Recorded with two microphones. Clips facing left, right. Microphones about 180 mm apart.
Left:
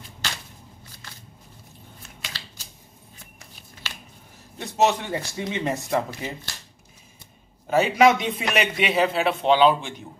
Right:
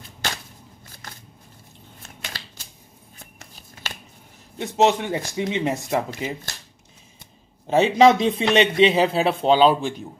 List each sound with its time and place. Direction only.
2.2 s typewriter: 55° right (ahead or behind)
4.6 s speech: 15° right (ahead or behind)
7.6 s a man's voice: 25° right (ahead or behind)